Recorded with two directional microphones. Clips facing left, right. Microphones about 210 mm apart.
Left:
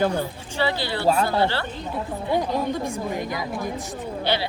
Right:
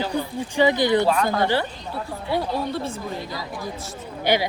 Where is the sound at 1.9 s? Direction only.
15° left (ahead or behind).